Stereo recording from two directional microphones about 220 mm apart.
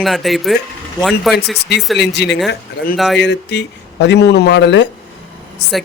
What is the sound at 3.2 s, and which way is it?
A man's voice, 55° left (ahead or behind).